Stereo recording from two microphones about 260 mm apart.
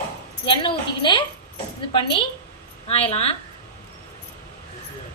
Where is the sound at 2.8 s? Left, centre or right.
Left.